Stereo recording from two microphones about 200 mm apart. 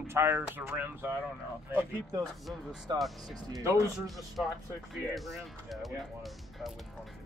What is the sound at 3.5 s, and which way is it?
Speech, 15° right (ahead or behind).